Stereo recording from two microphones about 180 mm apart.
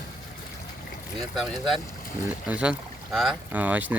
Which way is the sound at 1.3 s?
Centre (ahead or behind).